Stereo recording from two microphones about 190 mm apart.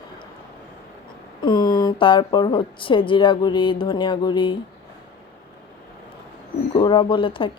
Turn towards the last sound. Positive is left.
turn(degrees=25)  # may be behind; listen again after turning